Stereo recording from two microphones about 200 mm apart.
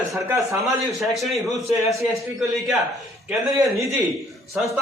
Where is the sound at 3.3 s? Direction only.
15° right (ahead or behind).